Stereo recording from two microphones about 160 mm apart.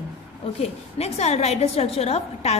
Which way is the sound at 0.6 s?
40° left (ahead or behind).